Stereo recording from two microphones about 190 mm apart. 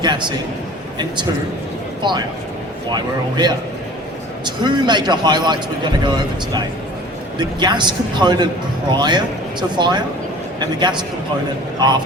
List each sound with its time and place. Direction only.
0.0 s a man's voice: 25° right (ahead or behind)